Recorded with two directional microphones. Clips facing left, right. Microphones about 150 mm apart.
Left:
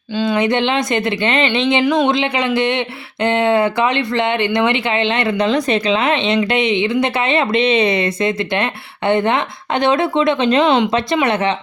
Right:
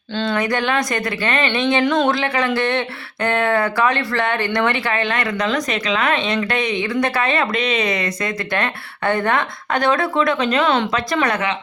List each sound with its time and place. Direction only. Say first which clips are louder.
0.1 s speech: left 4 dB; 10° left (ahead or behind)
0.3 s speech: left 3 dB; 25° left (ahead or behind)
2.0 s speech: left 2 dB; 20° left (ahead or behind)